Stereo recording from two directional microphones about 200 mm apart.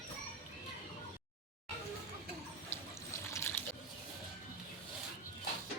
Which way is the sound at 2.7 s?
10° left (ahead or behind).